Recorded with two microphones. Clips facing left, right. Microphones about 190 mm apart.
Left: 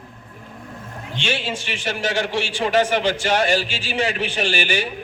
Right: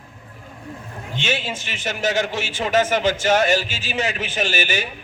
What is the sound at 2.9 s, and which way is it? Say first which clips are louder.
A man's voice: right 1 dB; 45° right (ahead or behind).